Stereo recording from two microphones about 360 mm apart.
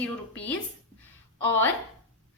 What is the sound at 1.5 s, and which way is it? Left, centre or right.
Speech, centre.